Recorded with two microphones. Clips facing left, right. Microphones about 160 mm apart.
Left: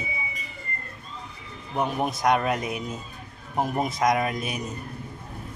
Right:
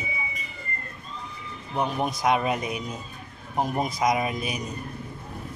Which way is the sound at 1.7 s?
Centre (ahead or behind).